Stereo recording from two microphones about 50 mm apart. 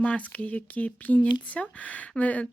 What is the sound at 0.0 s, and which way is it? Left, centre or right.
Speech, left.